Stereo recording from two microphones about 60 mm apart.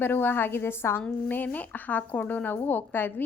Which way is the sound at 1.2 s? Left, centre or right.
Left.